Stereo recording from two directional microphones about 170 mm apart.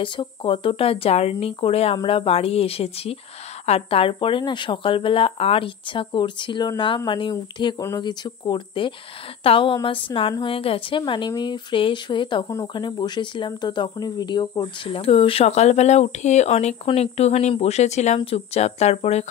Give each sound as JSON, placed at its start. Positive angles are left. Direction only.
{"t": 0.0, "sound": "speech", "side_deg": 30}